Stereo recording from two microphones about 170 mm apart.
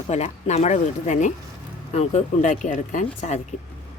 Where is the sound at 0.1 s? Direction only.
40° left (ahead or behind).